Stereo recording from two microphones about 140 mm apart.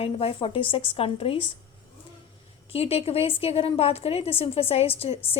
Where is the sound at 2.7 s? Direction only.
45° left (ahead or behind).